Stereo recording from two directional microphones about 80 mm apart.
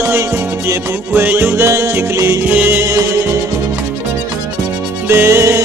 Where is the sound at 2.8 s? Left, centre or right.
Right.